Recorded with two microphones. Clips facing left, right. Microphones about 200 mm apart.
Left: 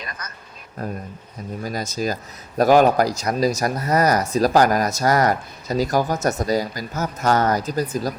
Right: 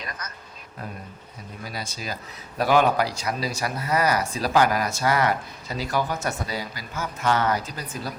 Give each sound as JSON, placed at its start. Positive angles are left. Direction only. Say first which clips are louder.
{"t": 1.6, "sound": "speech", "louder": "left 9 dB", "side_deg": 45}